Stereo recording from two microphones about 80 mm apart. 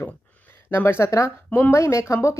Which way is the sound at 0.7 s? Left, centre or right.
Left.